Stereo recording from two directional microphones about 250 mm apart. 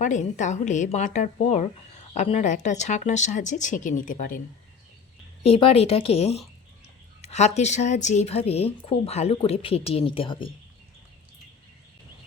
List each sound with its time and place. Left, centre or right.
0.0 s a woman's voice: left
5.4 s a woman's voice: left